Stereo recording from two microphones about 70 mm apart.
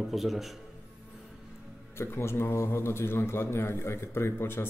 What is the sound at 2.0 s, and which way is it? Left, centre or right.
A man's voice, left.